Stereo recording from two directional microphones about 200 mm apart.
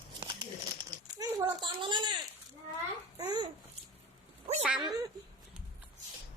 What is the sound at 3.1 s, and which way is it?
Babbling, 20° right (ahead or behind).